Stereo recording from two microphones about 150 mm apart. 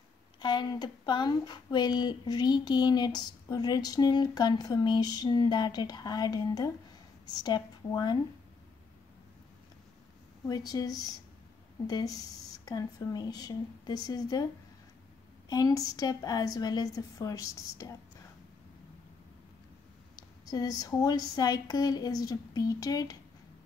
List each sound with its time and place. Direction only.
0.4 s speech: 30° left (ahead or behind)
10.5 s speech: 25° left (ahead or behind)
15.5 s speech: 25° left (ahead or behind)
20.4 s speech: 25° left (ahead or behind)